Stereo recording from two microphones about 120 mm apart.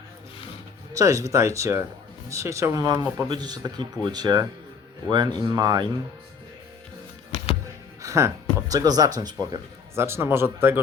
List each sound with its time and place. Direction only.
0.9 s speech: 25° right (ahead or behind)
8.0 s speech: 25° right (ahead or behind)
9.9 s speech: 20° right (ahead or behind)